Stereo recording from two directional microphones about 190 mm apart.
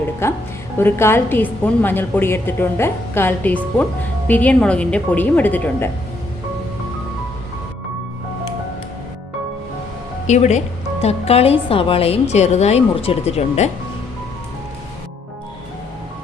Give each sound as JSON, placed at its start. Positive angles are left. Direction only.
{"t": 0.2, "sound": "a woman's voice", "side_deg": 15}
{"t": 10.2, "sound": "a woman's voice", "side_deg": 40}